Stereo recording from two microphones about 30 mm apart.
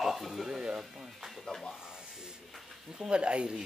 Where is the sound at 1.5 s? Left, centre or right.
Centre.